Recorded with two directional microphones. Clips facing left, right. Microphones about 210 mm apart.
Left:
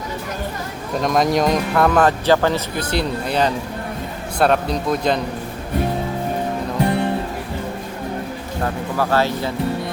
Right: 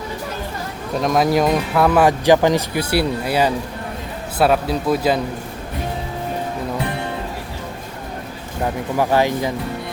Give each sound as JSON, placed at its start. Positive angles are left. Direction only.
{"t": 1.0, "sound": "a man's voice", "side_deg": -5}
{"t": 8.6, "sound": "speech", "side_deg": -15}